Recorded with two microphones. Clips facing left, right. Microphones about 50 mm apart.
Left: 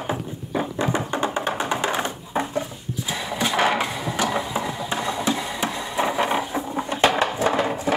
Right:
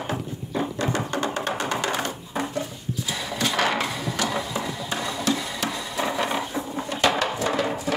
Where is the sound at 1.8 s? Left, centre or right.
Left.